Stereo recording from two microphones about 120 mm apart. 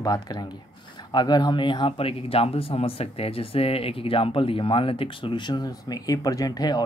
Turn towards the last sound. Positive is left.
turn(degrees=35)  # may be behind; listen again after turning